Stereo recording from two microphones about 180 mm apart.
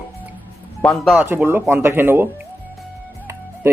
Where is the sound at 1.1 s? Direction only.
10° right (ahead or behind).